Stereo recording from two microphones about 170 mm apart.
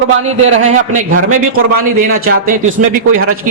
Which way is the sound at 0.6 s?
50° right (ahead or behind).